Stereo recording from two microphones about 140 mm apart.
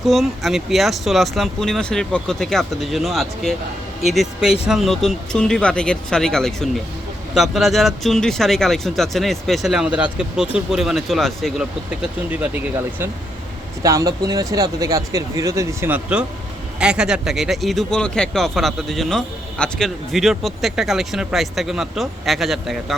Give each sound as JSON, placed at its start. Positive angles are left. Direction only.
{"t": 0.0, "sound": "speech", "side_deg": 0}
{"t": 13.8, "sound": "speech", "side_deg": -25}
{"t": 15.9, "sound": "speech", "side_deg": -10}